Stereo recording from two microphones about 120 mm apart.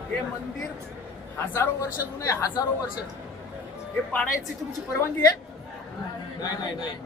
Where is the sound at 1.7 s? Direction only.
25° left (ahead or behind).